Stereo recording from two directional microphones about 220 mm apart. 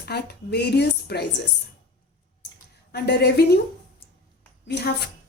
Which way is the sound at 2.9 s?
45° left (ahead or behind).